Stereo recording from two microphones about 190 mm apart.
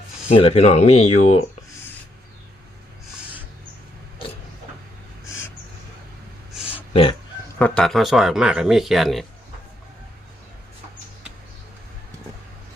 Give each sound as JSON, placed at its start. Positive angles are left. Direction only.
{"t": 0.3, "sound": "speech", "side_deg": 30}
{"t": 6.5, "sound": "a sound", "side_deg": -5}
{"t": 6.9, "sound": "speech", "side_deg": 30}
{"t": 7.6, "sound": "speech", "side_deg": 5}